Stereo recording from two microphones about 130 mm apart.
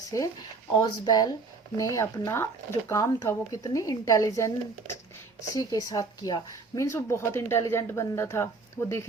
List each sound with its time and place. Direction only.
0.1 s speech: 25° left (ahead or behind)
5.5 s speech: 30° left (ahead or behind)